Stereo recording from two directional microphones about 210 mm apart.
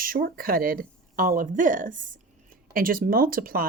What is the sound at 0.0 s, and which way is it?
Speech, 45° right (ahead or behind).